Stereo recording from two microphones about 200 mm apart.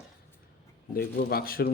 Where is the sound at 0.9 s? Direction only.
50° left (ahead or behind).